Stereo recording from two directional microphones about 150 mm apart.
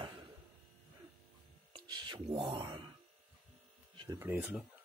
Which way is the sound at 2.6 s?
30° right (ahead or behind).